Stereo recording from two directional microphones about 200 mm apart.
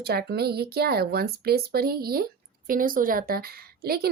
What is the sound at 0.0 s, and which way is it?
Speech, 50° right (ahead or behind).